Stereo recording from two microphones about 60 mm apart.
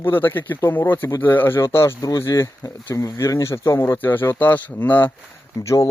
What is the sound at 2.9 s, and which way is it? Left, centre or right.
Speech, left.